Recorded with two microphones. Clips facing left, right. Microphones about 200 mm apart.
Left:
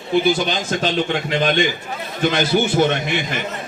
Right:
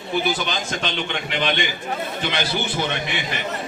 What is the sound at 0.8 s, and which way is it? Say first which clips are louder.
A man's voice: left 7 dB; 35° left (ahead or behind).